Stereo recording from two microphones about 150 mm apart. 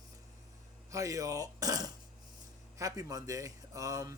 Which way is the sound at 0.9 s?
20° right (ahead or behind).